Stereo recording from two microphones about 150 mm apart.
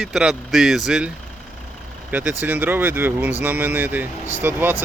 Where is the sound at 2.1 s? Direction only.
10° right (ahead or behind).